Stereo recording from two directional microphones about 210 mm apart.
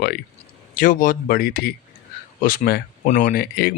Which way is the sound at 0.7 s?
40° left (ahead or behind).